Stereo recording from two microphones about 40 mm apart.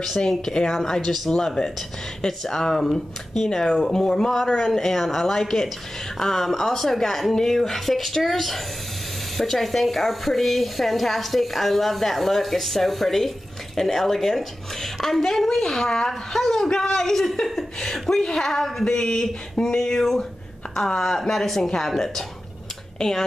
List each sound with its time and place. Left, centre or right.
0.2 s a woman's voice: centre
0.7 s a woman's voice: centre
18.2 s a woman's voice: centre